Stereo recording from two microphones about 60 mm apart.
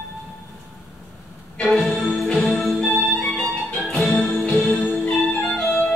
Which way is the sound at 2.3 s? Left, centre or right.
Centre.